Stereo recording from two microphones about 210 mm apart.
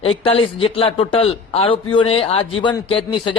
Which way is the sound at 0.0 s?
25° left (ahead or behind).